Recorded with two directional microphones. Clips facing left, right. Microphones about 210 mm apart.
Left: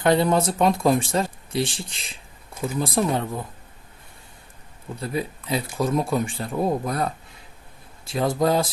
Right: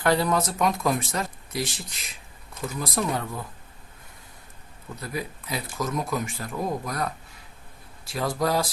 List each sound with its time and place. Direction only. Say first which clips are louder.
0.0 s speech: left 4 dB; 20° left (ahead or behind)
4.9 s speech: left 5 dB; 25° left (ahead or behind)